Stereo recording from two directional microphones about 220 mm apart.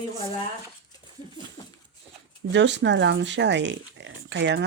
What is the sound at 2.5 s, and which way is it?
Speech, 55° right (ahead or behind).